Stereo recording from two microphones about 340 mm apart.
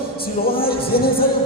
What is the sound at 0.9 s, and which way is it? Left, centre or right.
Music, centre.